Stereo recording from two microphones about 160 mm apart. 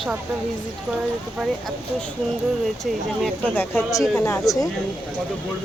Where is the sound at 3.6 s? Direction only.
15° left (ahead or behind).